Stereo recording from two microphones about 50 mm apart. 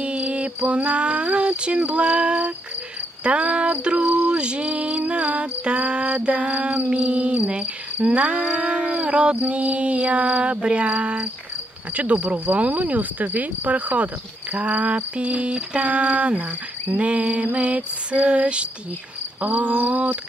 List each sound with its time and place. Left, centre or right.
0.0 s cricket: right
3.3 s speech: right